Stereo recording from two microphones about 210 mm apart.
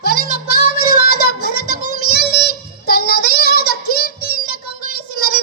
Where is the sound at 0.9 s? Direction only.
45° left (ahead or behind).